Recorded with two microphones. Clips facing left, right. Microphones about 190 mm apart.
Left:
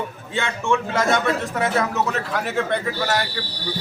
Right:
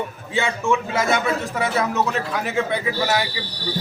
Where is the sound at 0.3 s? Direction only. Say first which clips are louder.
Right 1 dB; 5° right (ahead or behind).